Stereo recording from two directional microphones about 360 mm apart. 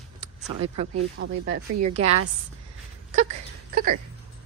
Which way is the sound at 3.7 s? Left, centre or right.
Right.